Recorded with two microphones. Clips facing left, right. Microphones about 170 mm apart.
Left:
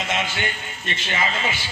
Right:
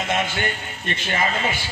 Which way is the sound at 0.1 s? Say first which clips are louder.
Right 4 dB; 50° right (ahead or behind).